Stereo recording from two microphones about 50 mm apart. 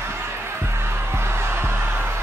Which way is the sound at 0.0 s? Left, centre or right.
Right.